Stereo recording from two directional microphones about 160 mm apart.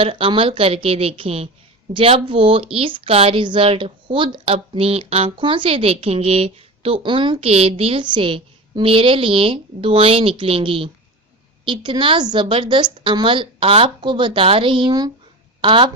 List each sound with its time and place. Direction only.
0.0 s a woman's voice: 30° right (ahead or behind)